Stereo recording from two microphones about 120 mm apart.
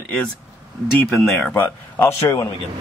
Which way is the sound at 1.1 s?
10° left (ahead or behind).